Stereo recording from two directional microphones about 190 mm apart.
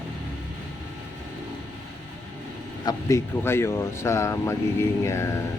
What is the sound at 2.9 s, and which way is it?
Speech, 15° left (ahead or behind).